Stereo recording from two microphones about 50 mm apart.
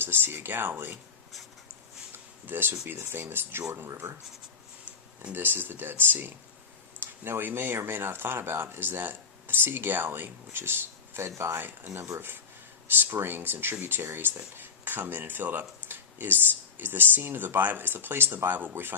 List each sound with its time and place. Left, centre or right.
0.0 s speech: right
2.5 s speech: right
5.3 s speech: right
12.9 s speech: right